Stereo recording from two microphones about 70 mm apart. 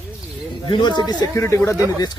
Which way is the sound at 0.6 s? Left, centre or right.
Left.